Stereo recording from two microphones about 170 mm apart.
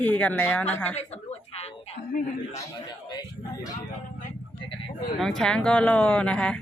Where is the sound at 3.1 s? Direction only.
25° left (ahead or behind).